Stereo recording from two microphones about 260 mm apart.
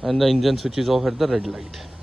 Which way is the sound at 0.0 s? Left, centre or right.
Centre.